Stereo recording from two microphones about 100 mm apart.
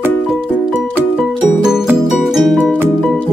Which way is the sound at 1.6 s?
5° right (ahead or behind).